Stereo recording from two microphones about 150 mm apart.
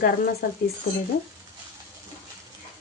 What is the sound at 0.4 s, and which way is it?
Speech, 80° left.